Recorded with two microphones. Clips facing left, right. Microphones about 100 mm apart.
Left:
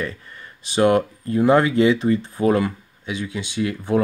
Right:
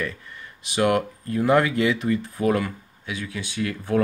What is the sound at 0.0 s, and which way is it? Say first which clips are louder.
Speech: left 2 dB; 35° left (ahead or behind).